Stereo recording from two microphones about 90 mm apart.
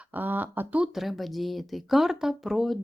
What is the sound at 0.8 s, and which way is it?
Speech, centre (ahead or behind).